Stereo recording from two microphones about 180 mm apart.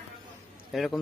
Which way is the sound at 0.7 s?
Centre (ahead or behind).